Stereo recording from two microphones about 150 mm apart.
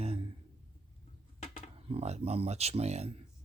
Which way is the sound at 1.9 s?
45° right (ahead or behind).